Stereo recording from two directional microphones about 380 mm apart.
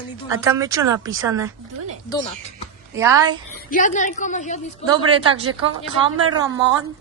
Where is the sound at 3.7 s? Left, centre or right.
Left.